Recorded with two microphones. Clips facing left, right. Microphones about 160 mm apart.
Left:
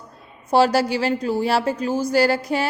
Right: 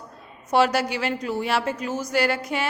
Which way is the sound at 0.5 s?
30° left (ahead or behind).